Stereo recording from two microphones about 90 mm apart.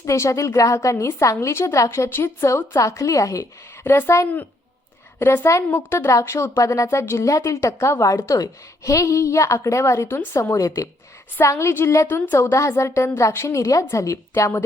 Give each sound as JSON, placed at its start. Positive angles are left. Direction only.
{"t": 0.0, "sound": "a woman's voice", "side_deg": 35}
{"t": 3.8, "sound": "a woman's voice", "side_deg": 25}